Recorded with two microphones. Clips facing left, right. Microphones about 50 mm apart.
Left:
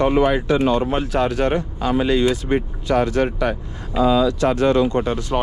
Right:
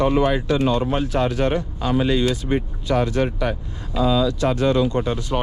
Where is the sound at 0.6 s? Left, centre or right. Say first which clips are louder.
Left 2 dB; left.